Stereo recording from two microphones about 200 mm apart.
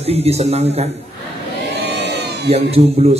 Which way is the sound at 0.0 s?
30° right (ahead or behind).